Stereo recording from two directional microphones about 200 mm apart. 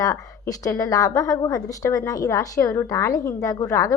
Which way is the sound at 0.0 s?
15° left (ahead or behind).